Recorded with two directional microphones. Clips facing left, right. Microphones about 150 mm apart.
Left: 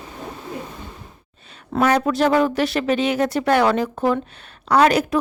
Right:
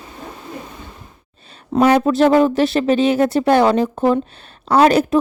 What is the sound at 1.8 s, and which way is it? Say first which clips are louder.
Speech: right 4 dB; 30° right (ahead or behind).